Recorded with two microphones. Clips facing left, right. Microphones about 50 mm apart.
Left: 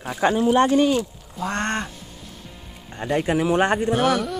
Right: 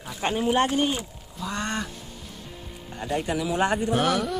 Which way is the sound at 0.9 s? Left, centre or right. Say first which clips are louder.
Left 9 dB; left.